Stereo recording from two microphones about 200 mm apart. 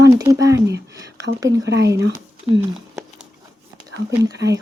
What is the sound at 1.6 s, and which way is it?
Speech, 60° right (ahead or behind).